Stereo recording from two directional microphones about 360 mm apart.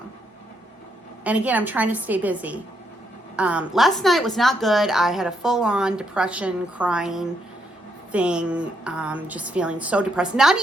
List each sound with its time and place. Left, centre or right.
1.2 s a woman's voice: centre